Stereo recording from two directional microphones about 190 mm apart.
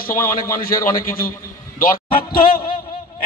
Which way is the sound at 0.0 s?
50° left (ahead or behind).